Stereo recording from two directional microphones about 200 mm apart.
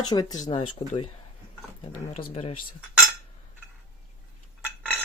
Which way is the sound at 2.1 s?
30° left (ahead or behind).